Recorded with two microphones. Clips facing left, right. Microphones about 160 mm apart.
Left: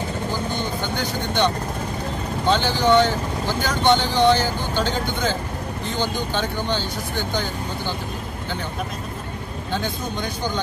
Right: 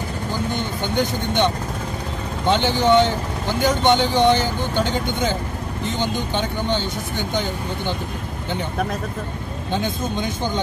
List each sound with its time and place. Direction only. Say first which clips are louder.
0.9 s speech: right 5 dB; 20° right (ahead or behind)
9.7 s speech: right 3 dB; 20° right (ahead or behind)